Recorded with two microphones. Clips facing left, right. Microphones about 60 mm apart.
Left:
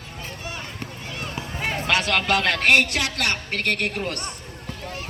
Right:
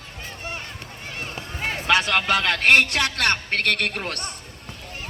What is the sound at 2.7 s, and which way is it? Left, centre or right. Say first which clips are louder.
A man's voice: right 1 dB; right.